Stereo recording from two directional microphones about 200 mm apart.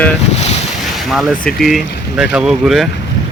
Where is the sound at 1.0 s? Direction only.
Centre (ahead or behind).